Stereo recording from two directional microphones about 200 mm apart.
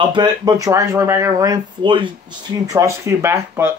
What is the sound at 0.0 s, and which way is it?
Speech, 20° right (ahead or behind).